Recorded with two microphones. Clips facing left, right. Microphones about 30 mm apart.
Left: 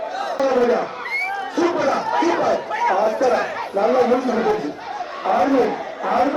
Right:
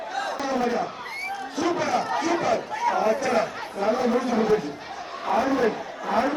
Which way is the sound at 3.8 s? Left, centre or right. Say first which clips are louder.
Left 7 dB; left.